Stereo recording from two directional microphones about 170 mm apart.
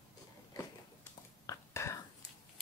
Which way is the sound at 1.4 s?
15° left (ahead or behind).